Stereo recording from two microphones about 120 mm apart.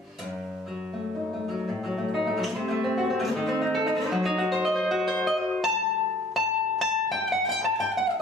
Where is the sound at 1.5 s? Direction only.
5° right (ahead or behind).